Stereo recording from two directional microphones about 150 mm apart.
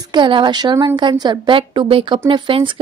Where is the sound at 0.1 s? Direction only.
30° right (ahead or behind).